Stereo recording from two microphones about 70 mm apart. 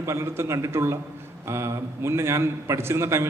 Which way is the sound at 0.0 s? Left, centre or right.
Right.